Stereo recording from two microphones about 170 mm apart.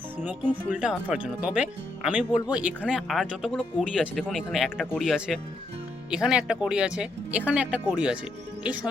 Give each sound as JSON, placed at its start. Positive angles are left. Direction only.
{"t": 0.7, "sound": "speech", "side_deg": -5}